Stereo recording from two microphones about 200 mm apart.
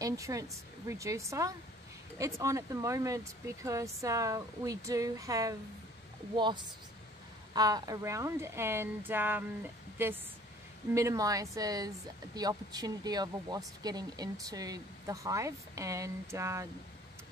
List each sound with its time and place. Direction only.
0.0 s speech: 15° right (ahead or behind)
11.0 s speech: 15° right (ahead or behind)